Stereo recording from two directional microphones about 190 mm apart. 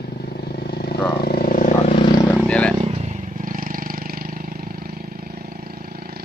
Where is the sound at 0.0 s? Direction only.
55° left (ahead or behind).